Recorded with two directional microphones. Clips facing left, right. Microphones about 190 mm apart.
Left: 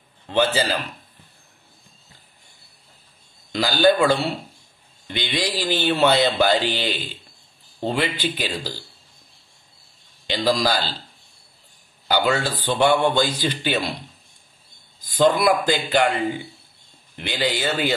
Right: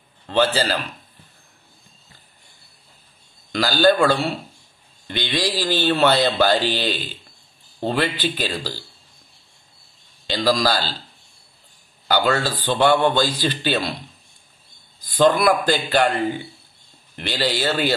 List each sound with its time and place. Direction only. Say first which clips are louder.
0.3 s speech: right 1 dB; 15° left (ahead or behind)
3.5 s speech: right 1 dB; 20° left (ahead or behind)
10.2 s speech: right 1 dB; 15° left (ahead or behind)
12.1 s speech: right 1 dB; 15° left (ahead or behind)
15.0 s speech: right 1 dB; 20° left (ahead or behind)
17.1 s speech: right 1 dB; 15° left (ahead or behind)